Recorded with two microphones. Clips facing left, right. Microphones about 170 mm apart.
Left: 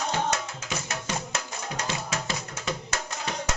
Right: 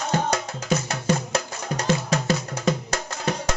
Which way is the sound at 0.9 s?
35° right (ahead or behind).